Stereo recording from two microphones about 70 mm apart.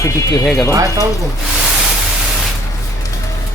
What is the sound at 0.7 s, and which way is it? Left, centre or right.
Speech, right.